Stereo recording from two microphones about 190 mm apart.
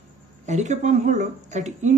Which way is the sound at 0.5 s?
40° right (ahead or behind).